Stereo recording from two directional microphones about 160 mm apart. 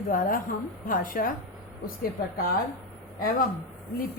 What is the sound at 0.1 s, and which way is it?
A woman's voice, 60° left (ahead or behind).